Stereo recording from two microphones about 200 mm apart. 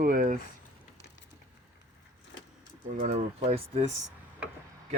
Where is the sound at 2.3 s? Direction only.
65° left (ahead or behind).